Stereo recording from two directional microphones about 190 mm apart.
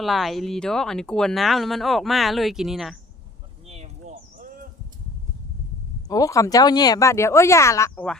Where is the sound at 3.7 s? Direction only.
35° right (ahead or behind).